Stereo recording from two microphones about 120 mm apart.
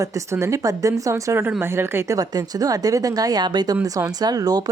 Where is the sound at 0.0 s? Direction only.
25° right (ahead or behind).